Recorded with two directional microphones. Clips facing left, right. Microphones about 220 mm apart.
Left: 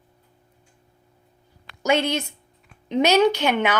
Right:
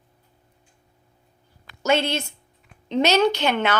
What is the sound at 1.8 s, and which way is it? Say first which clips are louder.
A woman's voice: even; 15° left (ahead or behind).